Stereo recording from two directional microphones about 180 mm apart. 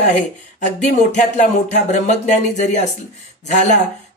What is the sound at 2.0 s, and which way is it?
Speech, 40° left (ahead or behind).